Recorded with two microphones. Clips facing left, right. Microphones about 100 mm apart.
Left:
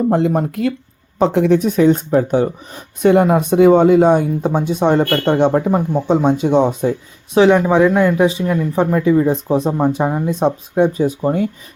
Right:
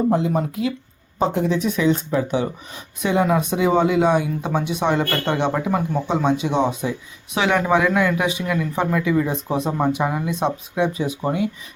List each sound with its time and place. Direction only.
0.1 s speech: 60° left (ahead or behind)
1.2 s a woman's voice: 80° left
1.5 s speech: 45° left (ahead or behind)
6.1 s speech: 45° left (ahead or behind)
7.3 s speech: 30° left (ahead or behind)